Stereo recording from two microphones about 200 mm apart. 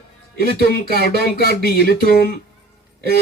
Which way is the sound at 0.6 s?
50° left (ahead or behind).